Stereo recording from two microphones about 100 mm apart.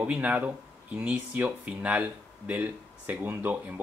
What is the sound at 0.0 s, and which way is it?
Speech, 15° right (ahead or behind).